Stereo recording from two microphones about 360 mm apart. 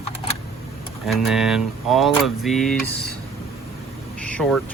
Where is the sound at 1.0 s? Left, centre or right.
Centre.